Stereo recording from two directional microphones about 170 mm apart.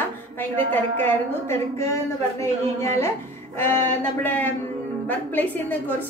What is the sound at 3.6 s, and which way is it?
A woman's voice, 15° left (ahead or behind).